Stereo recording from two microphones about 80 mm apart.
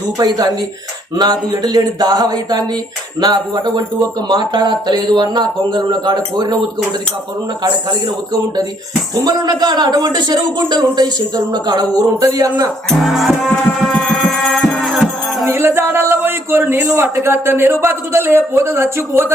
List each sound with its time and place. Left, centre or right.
0.2 s a man's voice: right
7.6 s a man's voice: right
12.2 s a man's voice: right
12.9 s music: centre
15.4 s speech: right